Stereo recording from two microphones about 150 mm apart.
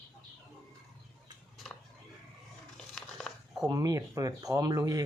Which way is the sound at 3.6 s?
25° right (ahead or behind).